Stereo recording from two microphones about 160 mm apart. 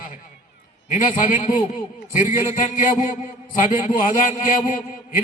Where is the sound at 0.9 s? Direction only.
50° left (ahead or behind).